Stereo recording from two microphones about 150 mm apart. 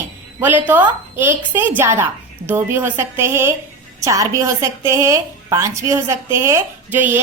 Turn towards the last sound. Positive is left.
turn(degrees=-10)  # may be behind; listen again after turning